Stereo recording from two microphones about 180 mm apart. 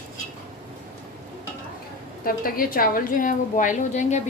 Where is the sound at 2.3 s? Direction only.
55° left (ahead or behind).